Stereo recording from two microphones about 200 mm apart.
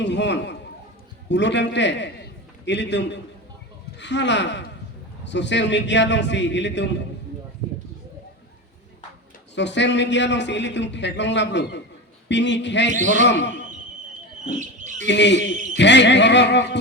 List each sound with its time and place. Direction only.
0.0 s a man's voice: 60° left (ahead or behind)
9.6 s speech: 60° left (ahead or behind)
14.5 s speech: 40° right (ahead or behind)
15.0 s speech: 60° left (ahead or behind)